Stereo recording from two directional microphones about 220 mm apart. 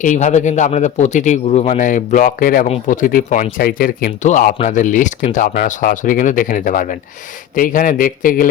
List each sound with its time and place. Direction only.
0.0 s speech: 35° left (ahead or behind)